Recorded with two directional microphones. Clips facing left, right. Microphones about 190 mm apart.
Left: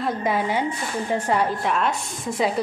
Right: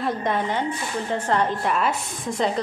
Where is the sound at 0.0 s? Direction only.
5° left (ahead or behind).